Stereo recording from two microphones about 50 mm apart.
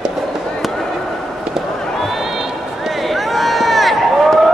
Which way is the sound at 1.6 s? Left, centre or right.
Centre.